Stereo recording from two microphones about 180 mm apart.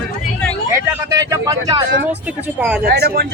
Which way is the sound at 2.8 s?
60° right (ahead or behind).